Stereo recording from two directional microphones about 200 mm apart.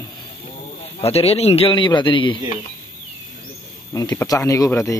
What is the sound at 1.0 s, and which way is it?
A man's voice, 30° left (ahead or behind).